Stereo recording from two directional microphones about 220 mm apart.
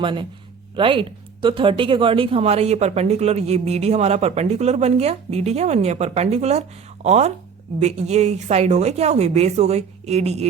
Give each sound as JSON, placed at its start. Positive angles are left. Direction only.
{"t": 0.0, "sound": "a woman's voice", "side_deg": -20}